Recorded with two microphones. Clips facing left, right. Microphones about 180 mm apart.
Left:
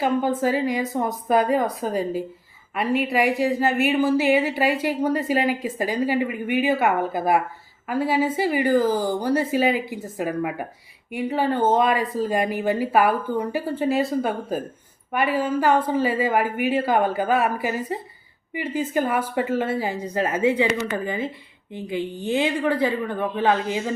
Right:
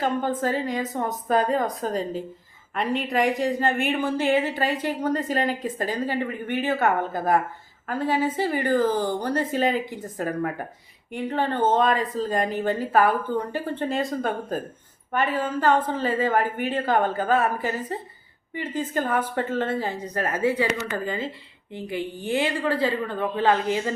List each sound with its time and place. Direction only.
0.0 s a woman's voice: 10° left (ahead or behind)
20.2 s a woman's voice: 20° left (ahead or behind)